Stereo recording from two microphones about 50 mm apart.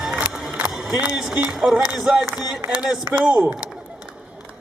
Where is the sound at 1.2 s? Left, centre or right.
Centre.